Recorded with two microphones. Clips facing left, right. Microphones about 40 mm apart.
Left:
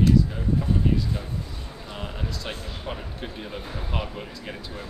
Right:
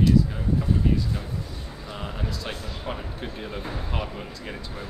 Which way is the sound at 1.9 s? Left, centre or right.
Centre.